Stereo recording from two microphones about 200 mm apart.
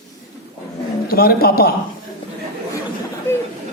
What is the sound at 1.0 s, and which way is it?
Speech, 50° left (ahead or behind).